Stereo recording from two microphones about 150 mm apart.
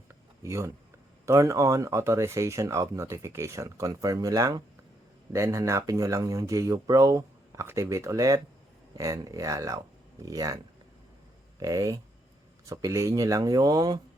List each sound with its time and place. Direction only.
0.1 s a sound: 20° right (ahead or behind)
1.2 s speech: 20° right (ahead or behind)
11.6 s speech: 25° right (ahead or behind)